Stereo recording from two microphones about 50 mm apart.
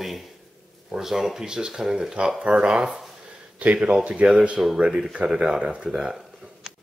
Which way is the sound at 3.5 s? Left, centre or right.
Right.